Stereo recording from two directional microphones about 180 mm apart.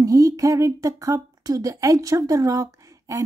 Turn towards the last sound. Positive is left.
turn(degrees=-15)  # may be behind; listen again after turning